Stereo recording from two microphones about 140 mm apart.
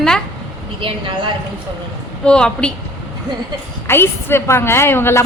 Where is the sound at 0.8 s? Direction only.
40° right (ahead or behind).